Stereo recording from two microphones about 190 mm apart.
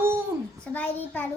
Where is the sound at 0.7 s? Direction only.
10° left (ahead or behind).